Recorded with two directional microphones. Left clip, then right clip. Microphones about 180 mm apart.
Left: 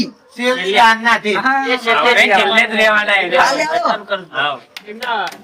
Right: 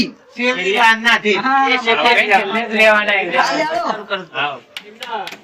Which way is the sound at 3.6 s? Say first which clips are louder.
Left 3 dB; 45° left (ahead or behind).